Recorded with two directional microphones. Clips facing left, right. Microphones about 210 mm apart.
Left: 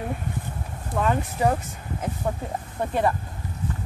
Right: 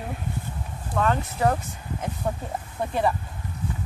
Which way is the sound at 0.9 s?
15° left (ahead or behind).